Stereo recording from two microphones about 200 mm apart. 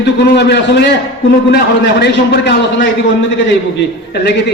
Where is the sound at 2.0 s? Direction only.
60° left (ahead or behind).